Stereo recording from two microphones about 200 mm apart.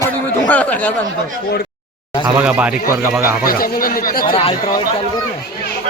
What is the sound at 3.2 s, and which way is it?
A man's voice, 45° left (ahead or behind).